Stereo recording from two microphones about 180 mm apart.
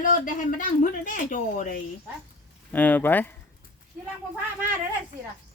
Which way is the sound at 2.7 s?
10° left (ahead or behind).